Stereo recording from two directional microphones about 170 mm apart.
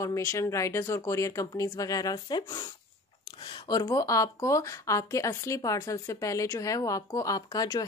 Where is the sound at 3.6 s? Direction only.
25° left (ahead or behind).